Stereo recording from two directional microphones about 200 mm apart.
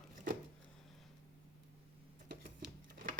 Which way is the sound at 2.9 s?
50° right (ahead or behind).